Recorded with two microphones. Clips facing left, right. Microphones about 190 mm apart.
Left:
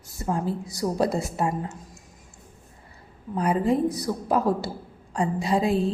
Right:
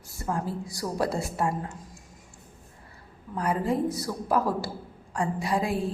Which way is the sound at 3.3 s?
20° left (ahead or behind).